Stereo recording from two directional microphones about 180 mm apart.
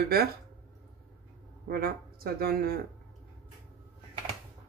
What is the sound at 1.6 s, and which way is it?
Speech, 55° right (ahead or behind).